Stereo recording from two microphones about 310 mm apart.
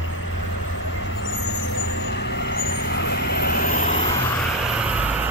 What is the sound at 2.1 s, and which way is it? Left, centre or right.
Vehicle, left.